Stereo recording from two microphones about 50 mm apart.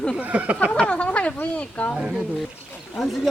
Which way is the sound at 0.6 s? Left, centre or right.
Left.